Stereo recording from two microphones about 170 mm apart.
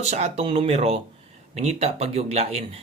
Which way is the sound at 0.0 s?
40° right (ahead or behind).